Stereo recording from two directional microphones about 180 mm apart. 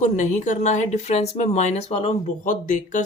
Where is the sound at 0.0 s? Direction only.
45° left (ahead or behind).